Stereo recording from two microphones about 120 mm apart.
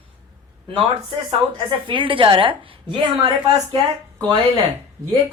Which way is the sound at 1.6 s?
45° right (ahead or behind).